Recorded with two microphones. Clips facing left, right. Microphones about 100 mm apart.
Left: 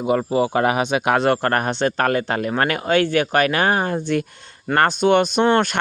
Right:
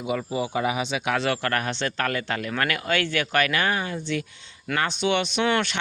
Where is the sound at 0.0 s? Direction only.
50° left (ahead or behind).